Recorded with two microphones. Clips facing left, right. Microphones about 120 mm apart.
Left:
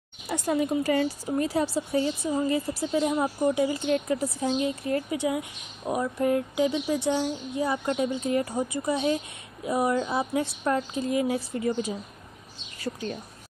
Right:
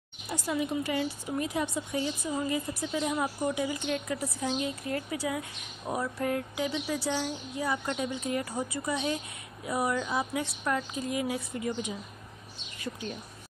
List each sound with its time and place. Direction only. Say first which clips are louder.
0.5 s a woman's voice: left 6 dB; 45° left (ahead or behind)